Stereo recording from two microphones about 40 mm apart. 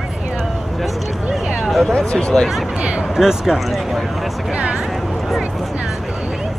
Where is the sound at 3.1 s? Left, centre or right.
Centre.